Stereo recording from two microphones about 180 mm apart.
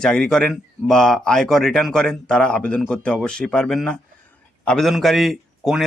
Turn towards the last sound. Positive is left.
turn(degrees=0)  # may be behind; listen again after turning